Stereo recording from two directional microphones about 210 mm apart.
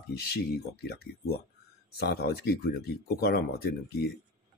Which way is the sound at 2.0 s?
50° left (ahead or behind).